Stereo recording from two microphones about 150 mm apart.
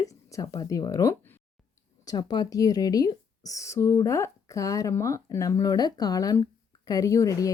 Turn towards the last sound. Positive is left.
turn(degrees=20)  # may be behind; listen again after turning